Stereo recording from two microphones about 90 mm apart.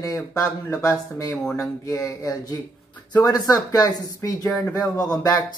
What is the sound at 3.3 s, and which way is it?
Speech, 45° left (ahead or behind).